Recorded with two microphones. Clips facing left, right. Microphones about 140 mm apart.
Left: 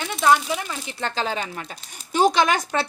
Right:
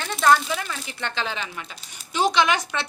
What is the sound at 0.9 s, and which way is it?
Speech, 35° left (ahead or behind).